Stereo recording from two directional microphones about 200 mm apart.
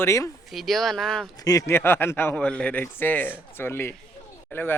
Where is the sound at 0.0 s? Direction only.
15° left (ahead or behind).